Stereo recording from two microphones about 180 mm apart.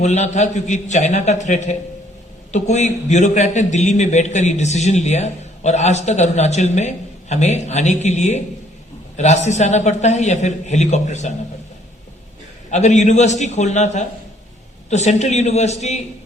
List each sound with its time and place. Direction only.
0.0 s a man's voice: 40° left (ahead or behind)
12.7 s a man's voice: 40° left (ahead or behind)